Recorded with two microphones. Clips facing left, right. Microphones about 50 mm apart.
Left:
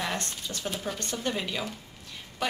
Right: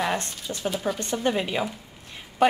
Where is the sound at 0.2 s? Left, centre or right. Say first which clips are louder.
Right 3 dB; right.